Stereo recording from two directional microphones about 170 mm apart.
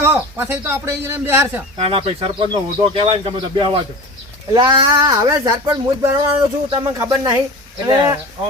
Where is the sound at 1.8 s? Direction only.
35° right (ahead or behind).